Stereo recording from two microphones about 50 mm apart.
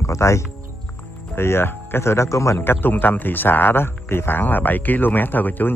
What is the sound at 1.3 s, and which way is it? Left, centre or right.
Speech, left.